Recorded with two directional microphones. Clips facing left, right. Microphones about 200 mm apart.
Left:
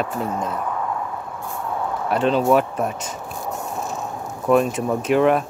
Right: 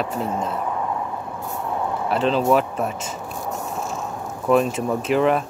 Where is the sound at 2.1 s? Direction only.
Centre (ahead or behind).